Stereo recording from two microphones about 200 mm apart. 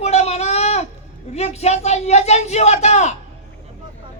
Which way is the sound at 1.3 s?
35° left (ahead or behind).